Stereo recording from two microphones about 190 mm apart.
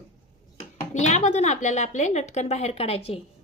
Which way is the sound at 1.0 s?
35° left (ahead or behind).